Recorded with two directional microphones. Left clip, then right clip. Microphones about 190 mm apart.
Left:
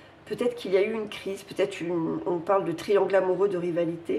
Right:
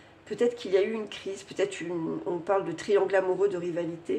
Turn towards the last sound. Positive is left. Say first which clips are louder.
# left 4 dB
turn(degrees=0)  # may be behind; listen again after turning